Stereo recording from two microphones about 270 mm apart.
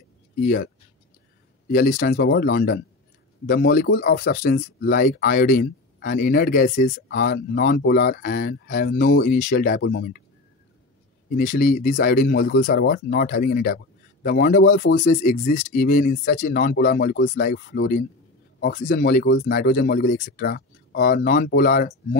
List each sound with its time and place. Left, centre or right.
1.7 s speech: left
11.3 s speech: left